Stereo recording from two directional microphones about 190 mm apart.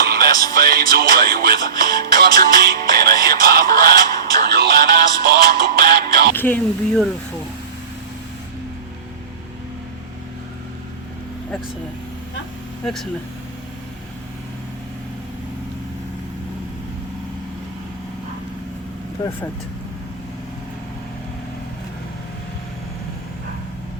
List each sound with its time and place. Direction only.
0.0 s music: 50° right (ahead or behind)
0.5 s speech: 50° right (ahead or behind)
4.4 s music: 55° right (ahead or behind)
6.3 s speech: 10° left (ahead or behind)
12.8 s speech: centre (ahead or behind)
19.2 s speech: 20° left (ahead or behind)